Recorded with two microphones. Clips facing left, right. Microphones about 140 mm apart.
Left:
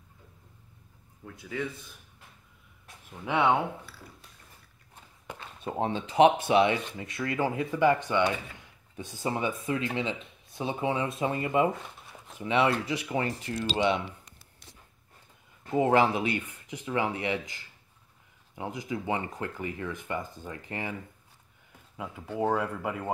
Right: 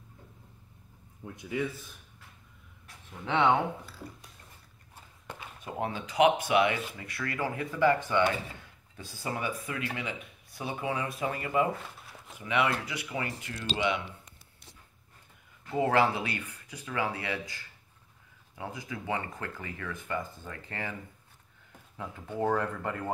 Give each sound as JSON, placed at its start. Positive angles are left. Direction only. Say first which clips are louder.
{"t": 1.2, "sound": "a man's voice", "louder": "right 2 dB", "side_deg": -20}
{"t": 3.3, "sound": "speech", "louder": "even", "side_deg": 10}
{"t": 5.6, "sound": "speech", "louder": "left 4 dB", "side_deg": 25}
{"t": 15.7, "sound": "speech", "louder": "left 3 dB", "side_deg": 20}
{"t": 21.9, "sound": "speech", "louder": "left 2 dB", "side_deg": 10}